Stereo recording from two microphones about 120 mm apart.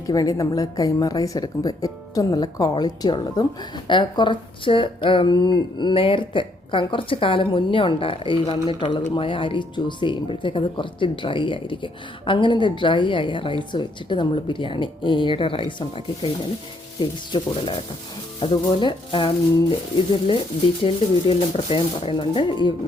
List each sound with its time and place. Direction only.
0.1 s a woman's voice: 30° left (ahead or behind)
20.8 s speech: 50° left (ahead or behind)